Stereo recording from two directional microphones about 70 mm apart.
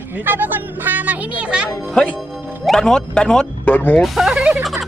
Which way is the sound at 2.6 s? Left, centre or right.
Centre.